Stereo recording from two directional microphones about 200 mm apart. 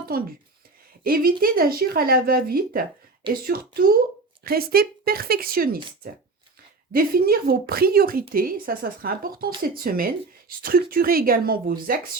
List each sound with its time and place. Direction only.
0.1 s speech: 50° right (ahead or behind)
6.9 s speech: 50° right (ahead or behind)